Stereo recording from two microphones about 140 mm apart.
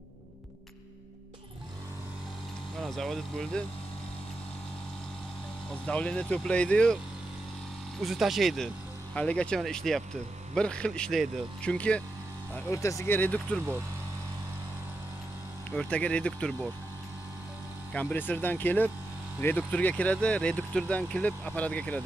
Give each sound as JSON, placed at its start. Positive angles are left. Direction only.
{"t": 2.8, "sound": "speech", "side_deg": 0}
{"t": 5.9, "sound": "speech", "side_deg": 10}
{"t": 8.0, "sound": "speech", "side_deg": 0}
{"t": 12.5, "sound": "speech", "side_deg": 20}
{"t": 15.7, "sound": "speech", "side_deg": 5}
{"t": 17.9, "sound": "speech", "side_deg": 10}